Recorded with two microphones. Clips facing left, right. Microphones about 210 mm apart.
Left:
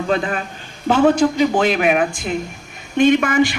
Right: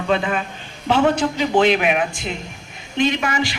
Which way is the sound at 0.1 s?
40° left (ahead or behind).